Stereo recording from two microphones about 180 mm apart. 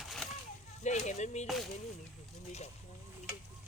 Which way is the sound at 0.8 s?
40° left (ahead or behind).